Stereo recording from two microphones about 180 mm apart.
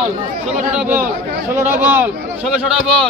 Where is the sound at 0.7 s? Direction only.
10° right (ahead or behind).